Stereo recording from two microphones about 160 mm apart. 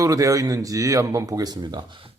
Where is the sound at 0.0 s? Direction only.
20° right (ahead or behind).